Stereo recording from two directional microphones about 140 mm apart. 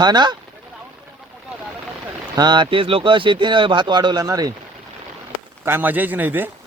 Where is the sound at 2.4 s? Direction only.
30° right (ahead or behind).